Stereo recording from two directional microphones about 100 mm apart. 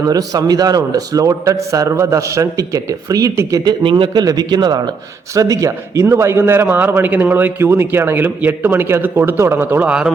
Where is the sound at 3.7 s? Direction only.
50° right (ahead or behind); by 9.9 s 20° right (ahead or behind).